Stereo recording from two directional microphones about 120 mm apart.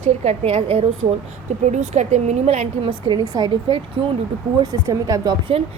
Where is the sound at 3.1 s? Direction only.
35° right (ahead or behind).